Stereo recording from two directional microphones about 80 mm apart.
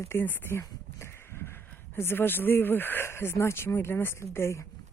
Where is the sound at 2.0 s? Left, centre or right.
Left.